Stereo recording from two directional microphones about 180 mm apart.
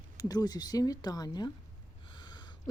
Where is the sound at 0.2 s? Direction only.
20° left (ahead or behind).